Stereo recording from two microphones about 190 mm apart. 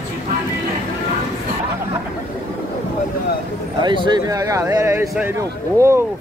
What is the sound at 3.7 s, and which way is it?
Speech, 25° right (ahead or behind).